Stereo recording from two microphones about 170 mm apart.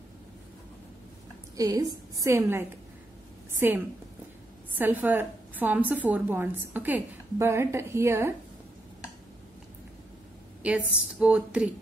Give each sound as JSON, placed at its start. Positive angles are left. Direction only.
{"t": 1.6, "sound": "a woman's voice", "side_deg": -20}
{"t": 10.6, "sound": "a woman's voice", "side_deg": -5}